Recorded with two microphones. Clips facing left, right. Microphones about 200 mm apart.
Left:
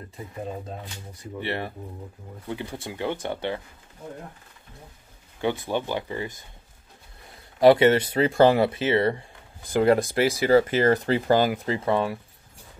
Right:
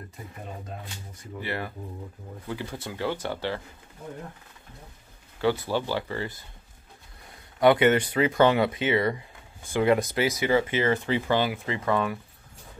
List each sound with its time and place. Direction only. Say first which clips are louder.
1.4 s speech: left 2 dB; 25° left (ahead or behind)
5.4 s speech: right 1 dB; 20° left (ahead or behind)
7.6 s speech: left 3 dB; 30° left (ahead or behind)